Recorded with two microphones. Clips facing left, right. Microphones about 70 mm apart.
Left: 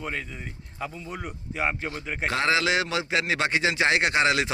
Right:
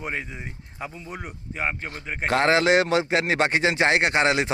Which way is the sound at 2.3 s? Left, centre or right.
Right.